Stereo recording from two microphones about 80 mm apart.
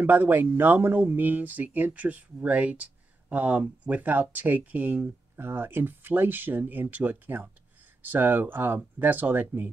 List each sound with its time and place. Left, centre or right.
0.0 s speech: right